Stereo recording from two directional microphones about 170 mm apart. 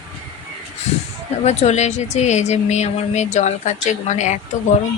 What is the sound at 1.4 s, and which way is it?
Speech, 40° left (ahead or behind).